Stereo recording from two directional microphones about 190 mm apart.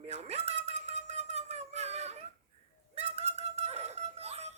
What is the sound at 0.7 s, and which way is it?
Wind instrument, 35° right (ahead or behind).